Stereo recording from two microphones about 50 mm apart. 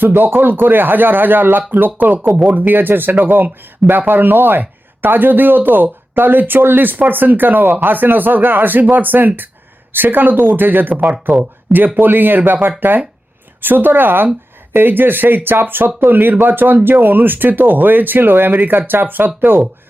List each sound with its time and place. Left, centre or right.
0.0 s speech: right